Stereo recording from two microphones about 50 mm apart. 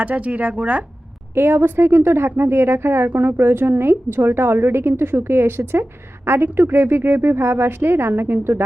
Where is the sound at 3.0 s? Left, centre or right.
Right.